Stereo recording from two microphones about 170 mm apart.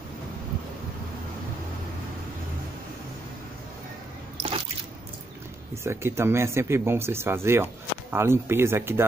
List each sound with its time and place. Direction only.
4.4 s drip: 30° right (ahead or behind)
5.9 s speech: 15° right (ahead or behind)